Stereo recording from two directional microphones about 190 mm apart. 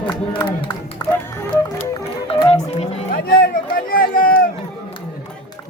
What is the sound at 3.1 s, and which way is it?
Run, 50° left (ahead or behind).